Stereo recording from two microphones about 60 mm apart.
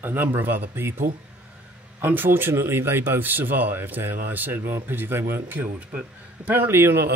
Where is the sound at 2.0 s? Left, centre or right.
Right.